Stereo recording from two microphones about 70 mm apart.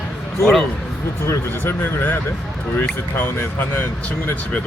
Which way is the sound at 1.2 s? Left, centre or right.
Left.